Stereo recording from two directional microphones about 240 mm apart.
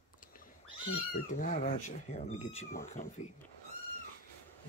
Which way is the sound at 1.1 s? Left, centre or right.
Left.